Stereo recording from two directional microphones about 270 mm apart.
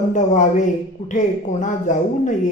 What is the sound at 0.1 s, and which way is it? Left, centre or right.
A woman's voice, left.